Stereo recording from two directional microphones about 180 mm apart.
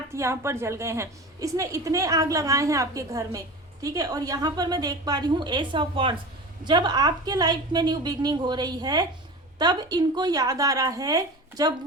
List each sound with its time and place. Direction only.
0.1 s a woman's voice: 15° right (ahead or behind)